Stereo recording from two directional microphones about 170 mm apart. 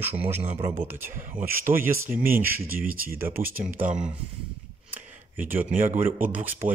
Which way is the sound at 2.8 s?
55° right (ahead or behind).